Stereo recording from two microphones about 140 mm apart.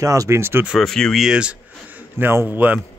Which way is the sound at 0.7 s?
5° left (ahead or behind).